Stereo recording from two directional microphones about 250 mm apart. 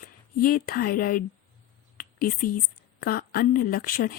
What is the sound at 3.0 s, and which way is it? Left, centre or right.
Speech, left.